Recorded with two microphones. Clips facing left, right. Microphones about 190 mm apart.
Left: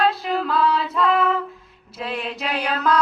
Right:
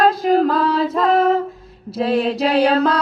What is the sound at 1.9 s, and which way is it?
Mantra, 35° right (ahead or behind).